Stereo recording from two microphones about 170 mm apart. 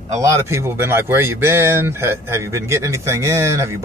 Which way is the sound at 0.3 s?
15° right (ahead or behind).